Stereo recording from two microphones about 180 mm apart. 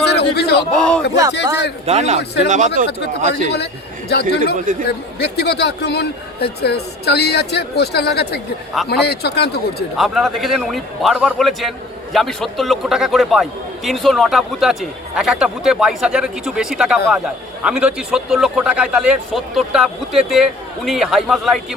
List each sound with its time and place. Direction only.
0.1 s a sound: 65° left (ahead or behind)
0.7 s a man's voice: 5° left (ahead or behind)
1.9 s a man's voice: 40° right (ahead or behind)
4.1 s speech: 65° left (ahead or behind)
4.5 s speech: 45° right (ahead or behind)
4.9 s speech: 65° left (ahead or behind)
10.0 s a man's voice: centre (ahead or behind)